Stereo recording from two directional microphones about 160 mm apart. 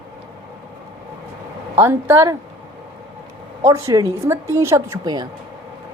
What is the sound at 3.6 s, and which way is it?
A woman's voice, 20° right (ahead or behind).